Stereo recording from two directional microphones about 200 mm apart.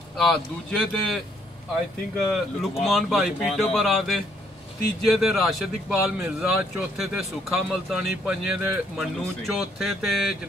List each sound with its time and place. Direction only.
0.1 s a man's voice: centre (ahead or behind)